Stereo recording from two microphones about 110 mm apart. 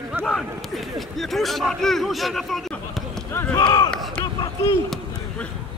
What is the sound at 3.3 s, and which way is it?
Run, 20° left (ahead or behind).